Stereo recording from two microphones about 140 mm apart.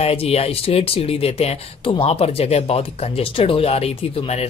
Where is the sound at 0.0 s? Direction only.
45° left (ahead or behind).